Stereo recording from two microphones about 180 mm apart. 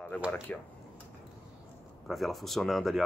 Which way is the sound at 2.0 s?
Centre (ahead or behind).